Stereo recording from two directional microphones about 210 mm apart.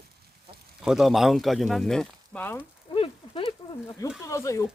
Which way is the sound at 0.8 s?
Centre (ahead or behind).